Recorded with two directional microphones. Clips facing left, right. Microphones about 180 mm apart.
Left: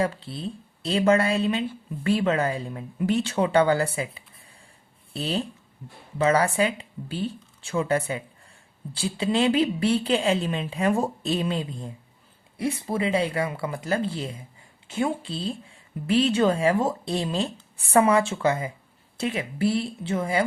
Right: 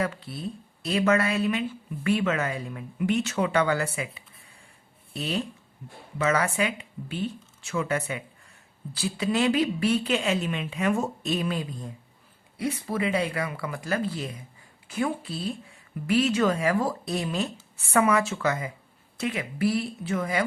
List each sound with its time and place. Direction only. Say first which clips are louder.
0.0 s a woman's voice: left 3 dB; 30° left (ahead or behind)